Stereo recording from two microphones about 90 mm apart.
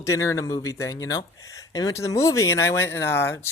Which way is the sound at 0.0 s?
35° left (ahead or behind).